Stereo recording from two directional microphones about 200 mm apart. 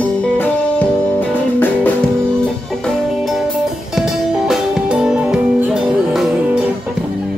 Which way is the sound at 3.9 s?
5° right (ahead or behind).